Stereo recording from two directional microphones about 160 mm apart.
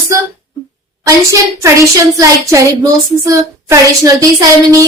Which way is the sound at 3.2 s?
20° right (ahead or behind).